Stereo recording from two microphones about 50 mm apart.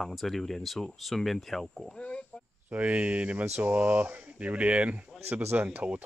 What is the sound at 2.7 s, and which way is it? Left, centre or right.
Speech, right.